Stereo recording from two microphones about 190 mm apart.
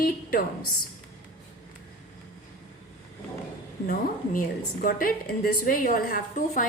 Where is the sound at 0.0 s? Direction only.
50° left (ahead or behind).